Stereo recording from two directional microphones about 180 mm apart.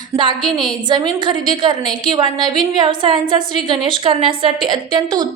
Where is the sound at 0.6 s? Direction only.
25° right (ahead or behind).